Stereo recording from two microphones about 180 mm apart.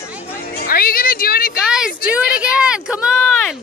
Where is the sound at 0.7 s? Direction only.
55° left (ahead or behind).